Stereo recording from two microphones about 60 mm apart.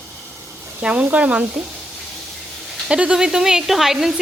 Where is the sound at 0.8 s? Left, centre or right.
Right.